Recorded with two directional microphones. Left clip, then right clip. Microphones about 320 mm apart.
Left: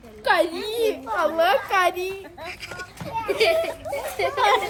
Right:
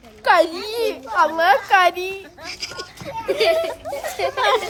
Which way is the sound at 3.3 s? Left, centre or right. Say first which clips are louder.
Right 3 dB; right.